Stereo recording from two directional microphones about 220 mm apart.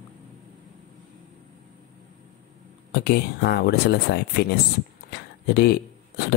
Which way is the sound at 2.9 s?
45° left (ahead or behind).